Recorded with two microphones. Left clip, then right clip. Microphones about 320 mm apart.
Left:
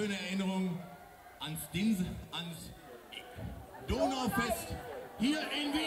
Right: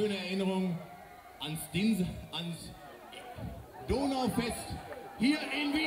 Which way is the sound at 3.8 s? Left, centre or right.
Left.